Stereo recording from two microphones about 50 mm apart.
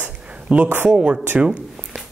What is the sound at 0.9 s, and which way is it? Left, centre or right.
Speech, centre.